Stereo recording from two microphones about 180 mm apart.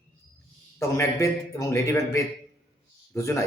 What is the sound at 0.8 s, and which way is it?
A man's voice, 15° left (ahead or behind).